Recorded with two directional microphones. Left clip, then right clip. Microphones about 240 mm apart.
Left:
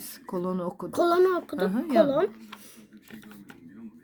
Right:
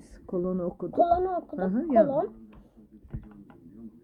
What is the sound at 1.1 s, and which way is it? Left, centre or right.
Speech, left.